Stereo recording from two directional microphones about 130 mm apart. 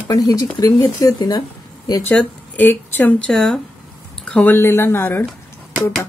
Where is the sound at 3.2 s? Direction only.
5° left (ahead or behind).